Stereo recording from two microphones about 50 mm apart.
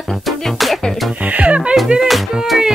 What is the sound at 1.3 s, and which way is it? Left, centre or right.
Music, right.